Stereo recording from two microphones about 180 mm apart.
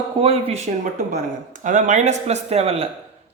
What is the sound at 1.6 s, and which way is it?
Speech, 45° right (ahead or behind).